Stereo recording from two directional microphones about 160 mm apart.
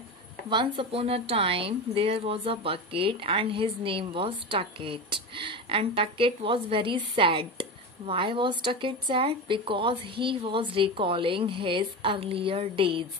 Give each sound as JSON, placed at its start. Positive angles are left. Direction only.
{"t": 0.5, "sound": "speech", "side_deg": -30}